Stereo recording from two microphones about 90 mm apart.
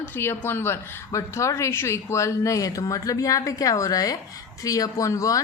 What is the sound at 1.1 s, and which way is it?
Speech, 35° left (ahead or behind).